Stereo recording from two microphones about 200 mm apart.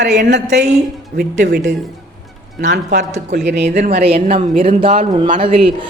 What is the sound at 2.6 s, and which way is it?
Speech, 60° right (ahead or behind).